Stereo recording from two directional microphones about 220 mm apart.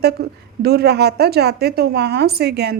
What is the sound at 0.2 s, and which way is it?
Speech, 45° right (ahead or behind).